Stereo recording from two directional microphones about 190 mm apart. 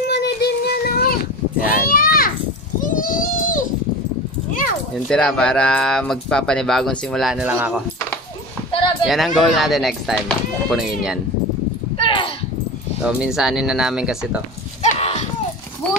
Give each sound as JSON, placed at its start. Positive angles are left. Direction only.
{"t": 0.1, "sound": "child singing", "side_deg": 60}
{"t": 1.7, "sound": "a sound", "side_deg": 50}
{"t": 2.8, "sound": "baby cry", "side_deg": 45}
{"t": 5.0, "sound": "speech", "side_deg": 5}
{"t": 9.0, "sound": "speech", "side_deg": 0}
{"t": 12.0, "sound": "a sound", "side_deg": 25}
{"t": 13.0, "sound": "speech", "side_deg": -5}
{"t": 14.8, "sound": "livestock", "side_deg": 35}